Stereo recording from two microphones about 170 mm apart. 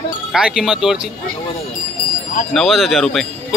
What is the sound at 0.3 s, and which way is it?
Speech, 5° right (ahead or behind).